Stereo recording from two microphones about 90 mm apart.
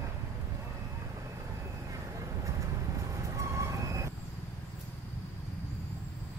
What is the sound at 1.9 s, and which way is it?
Vehicle, 35° right (ahead or behind).